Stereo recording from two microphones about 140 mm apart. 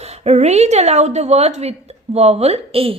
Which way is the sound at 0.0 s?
50° right (ahead or behind).